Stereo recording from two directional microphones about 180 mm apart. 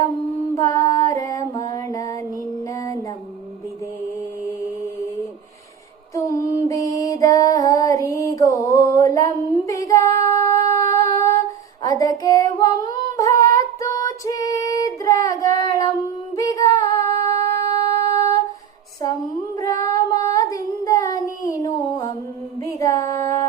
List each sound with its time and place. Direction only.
0.5 s music: 20° left (ahead or behind)
6.2 s music: 20° left (ahead or behind)
11.8 s female singing: 20° left (ahead or behind)
17.7 s a sound: 20° left (ahead or behind)
19.5 s child singing: 20° left (ahead or behind)
22.6 s a sound: 20° left (ahead or behind)